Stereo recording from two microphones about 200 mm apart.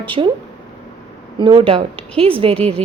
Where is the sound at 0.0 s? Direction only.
25° right (ahead or behind).